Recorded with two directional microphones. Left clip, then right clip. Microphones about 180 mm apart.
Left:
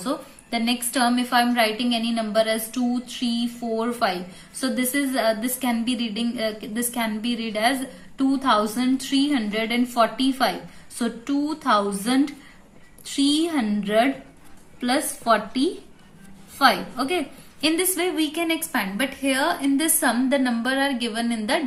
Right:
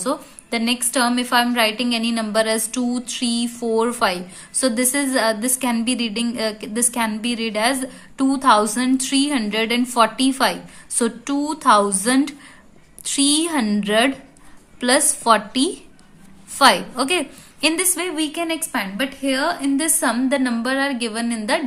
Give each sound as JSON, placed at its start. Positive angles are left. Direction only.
{"t": 0.0, "sound": "a woman's voice", "side_deg": -35}